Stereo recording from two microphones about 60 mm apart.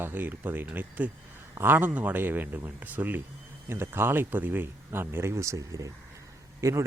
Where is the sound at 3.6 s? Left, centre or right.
Right.